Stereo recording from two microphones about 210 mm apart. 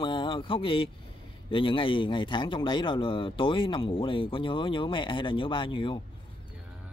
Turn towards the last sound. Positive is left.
turn(degrees=25)  # may be behind; listen again after turning